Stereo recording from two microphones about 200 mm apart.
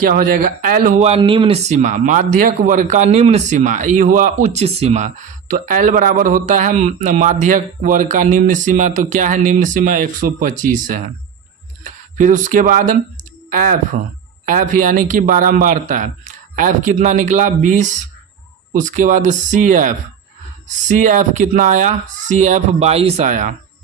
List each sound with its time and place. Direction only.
0.0 s speech: 45° right (ahead or behind)